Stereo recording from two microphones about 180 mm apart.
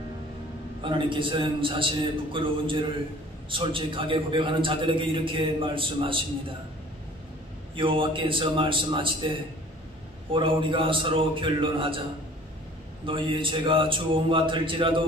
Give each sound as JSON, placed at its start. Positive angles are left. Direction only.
{"t": 0.8, "sound": "a man's voice", "side_deg": -30}
{"t": 7.7, "sound": "a man's voice", "side_deg": -30}
{"t": 10.3, "sound": "a man's voice", "side_deg": -30}
{"t": 13.0, "sound": "a man's voice", "side_deg": -30}